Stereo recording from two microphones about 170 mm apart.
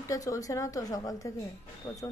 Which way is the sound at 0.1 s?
20° left (ahead or behind).